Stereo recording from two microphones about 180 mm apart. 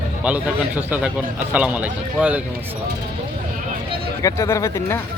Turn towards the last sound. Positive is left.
turn(degrees=15)  # may be behind; listen again after turning